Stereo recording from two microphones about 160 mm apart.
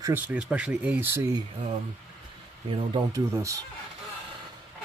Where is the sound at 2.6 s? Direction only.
35° right (ahead or behind).